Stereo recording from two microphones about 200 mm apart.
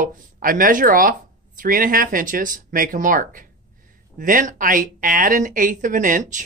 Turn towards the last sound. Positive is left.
turn(degrees=-40)  # may be behind; listen again after turning